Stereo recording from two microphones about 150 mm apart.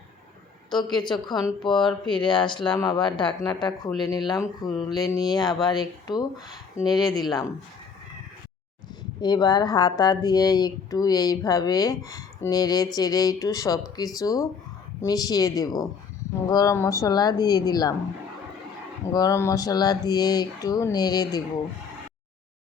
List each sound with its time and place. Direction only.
0.7 s a woman's voice: 30° left (ahead or behind)
4.7 s speech: centre (ahead or behind)
4.9 s speech: 25° left (ahead or behind)
9.2 s speech: 30° left (ahead or behind)
19.1 s speech: 20° left (ahead or behind)